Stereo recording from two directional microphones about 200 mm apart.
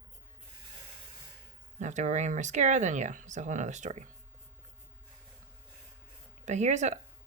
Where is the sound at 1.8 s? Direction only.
35° right (ahead or behind).